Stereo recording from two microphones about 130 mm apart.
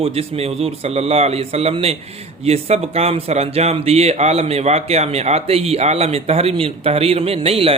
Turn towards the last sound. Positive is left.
turn(degrees=-50)  # may be behind; listen again after turning